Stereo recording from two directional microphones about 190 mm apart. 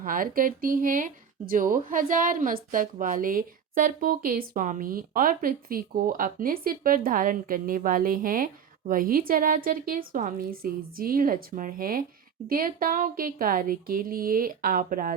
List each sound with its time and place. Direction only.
0.0 s speech: 50° right (ahead or behind)